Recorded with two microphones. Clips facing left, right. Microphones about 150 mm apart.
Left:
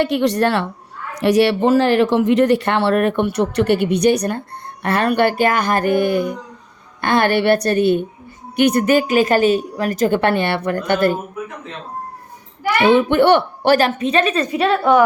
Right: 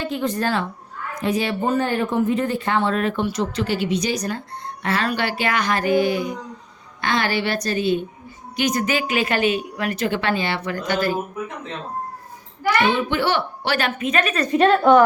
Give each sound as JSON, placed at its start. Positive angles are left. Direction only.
{"t": 0.0, "sound": "speech", "side_deg": 75}
{"t": 12.9, "sound": "speech", "side_deg": 60}
{"t": 14.5, "sound": "a woman's voice", "side_deg": 5}